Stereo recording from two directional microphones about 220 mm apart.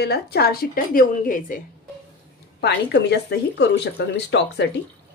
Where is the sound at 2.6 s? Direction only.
50° left (ahead or behind).